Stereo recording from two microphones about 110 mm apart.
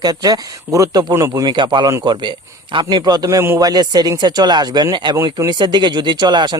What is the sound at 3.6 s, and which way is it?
Speech, 35° right (ahead or behind).